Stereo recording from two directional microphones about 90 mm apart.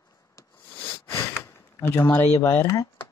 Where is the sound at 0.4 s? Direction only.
25° left (ahead or behind).